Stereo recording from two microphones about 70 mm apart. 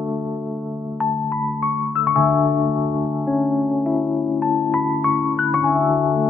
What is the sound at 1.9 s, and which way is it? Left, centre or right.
Music, centre.